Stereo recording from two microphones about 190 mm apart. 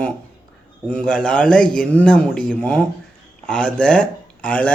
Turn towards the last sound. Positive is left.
turn(degrees=5)  # may be behind; listen again after turning